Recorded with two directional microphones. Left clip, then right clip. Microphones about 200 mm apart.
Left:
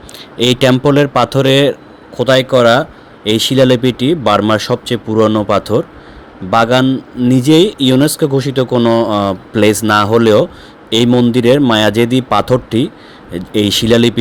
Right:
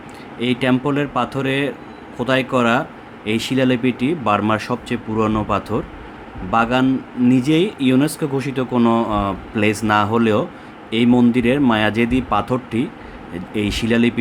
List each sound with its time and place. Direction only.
0.3 s speech: 40° left (ahead or behind)